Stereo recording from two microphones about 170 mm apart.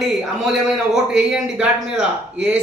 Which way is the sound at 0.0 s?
Centre (ahead or behind).